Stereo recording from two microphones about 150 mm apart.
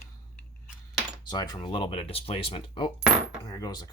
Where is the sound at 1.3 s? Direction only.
25° left (ahead or behind).